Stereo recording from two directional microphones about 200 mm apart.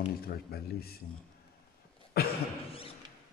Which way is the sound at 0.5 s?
50° left (ahead or behind).